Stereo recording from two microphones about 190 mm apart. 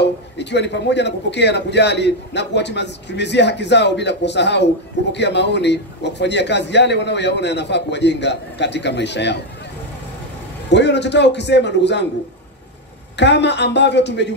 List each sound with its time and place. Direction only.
0.0 s a man's voice: 65° left (ahead or behind)
10.7 s a man's voice: 65° left (ahead or behind)
13.1 s a man's voice: 65° left (ahead or behind)